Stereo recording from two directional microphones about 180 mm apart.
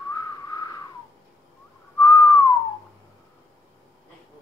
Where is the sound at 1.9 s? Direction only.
20° left (ahead or behind).